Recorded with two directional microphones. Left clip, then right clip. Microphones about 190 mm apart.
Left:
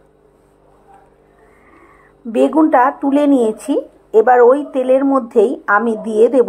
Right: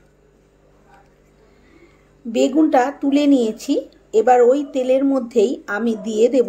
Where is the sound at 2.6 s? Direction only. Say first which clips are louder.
Left 5 dB; 15° right (ahead or behind).